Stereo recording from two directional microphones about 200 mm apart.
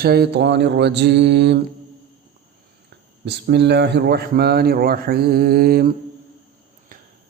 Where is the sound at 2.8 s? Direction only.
55° right (ahead or behind).